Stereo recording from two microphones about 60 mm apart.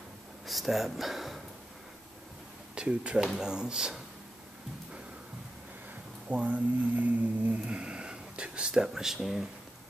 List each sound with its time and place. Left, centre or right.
0.5 s speech: centre
2.7 s speech: centre
6.2 s speech: right; by 9.5 s centre